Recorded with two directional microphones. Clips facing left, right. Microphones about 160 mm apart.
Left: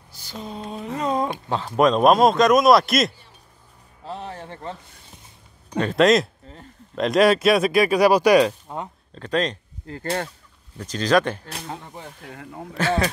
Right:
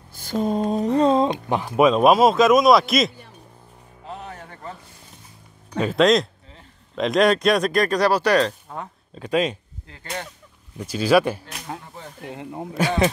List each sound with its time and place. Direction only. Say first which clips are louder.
0.1 s a sound: right 12 dB; 50° right (ahead or behind)
0.9 s a sound: right 5 dB; 30° right (ahead or behind)
1.5 s speech: left 1 dB; 15° right (ahead or behind)
1.9 s a man's voice: even; 5° right (ahead or behind)
4.1 s music: left 3 dB; 30° left (ahead or behind)
5.8 s a man's voice: even; centre (ahead or behind)
9.1 s speech: right 2 dB; 10° right (ahead or behind)
9.9 s speech: left 14 dB; 40° left (ahead or behind)
10.8 s speech: right 2 dB; 10° right (ahead or behind)
12.3 s speech: right 8 dB; 20° right (ahead or behind)